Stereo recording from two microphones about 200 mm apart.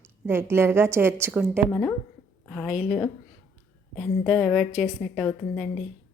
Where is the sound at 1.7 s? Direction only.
10° left (ahead or behind).